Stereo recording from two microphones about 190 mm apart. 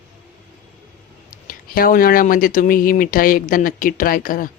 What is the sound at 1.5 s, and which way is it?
Speech, 50° left (ahead or behind).